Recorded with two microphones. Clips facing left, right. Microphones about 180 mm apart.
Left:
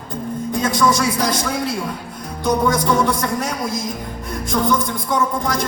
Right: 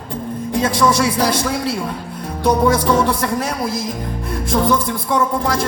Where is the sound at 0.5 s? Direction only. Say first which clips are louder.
Right 2 dB; 30° right (ahead or behind).